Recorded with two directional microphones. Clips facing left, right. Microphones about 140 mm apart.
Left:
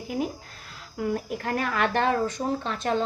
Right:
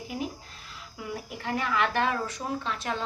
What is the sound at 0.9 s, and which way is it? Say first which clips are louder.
A woman's voice: left 9 dB; 50° left (ahead or behind).